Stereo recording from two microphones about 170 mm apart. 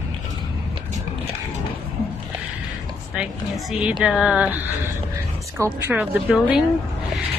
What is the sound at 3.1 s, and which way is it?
A woman's voice, 5° right (ahead or behind).